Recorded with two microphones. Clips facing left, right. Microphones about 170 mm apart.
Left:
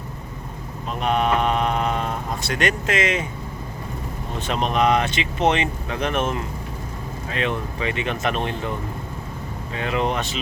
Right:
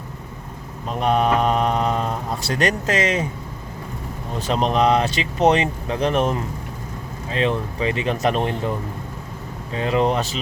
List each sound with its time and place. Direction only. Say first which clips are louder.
0.9 s a sound: right 2 dB; 35° right (ahead or behind)
4.4 s speech: right 2 dB; 35° right (ahead or behind)
9.7 s speech: right 4 dB; 35° right (ahead or behind)